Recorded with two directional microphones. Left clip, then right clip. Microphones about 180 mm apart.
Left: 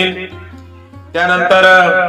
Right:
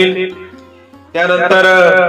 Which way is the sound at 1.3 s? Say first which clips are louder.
Left 1 dB; 40° right (ahead or behind).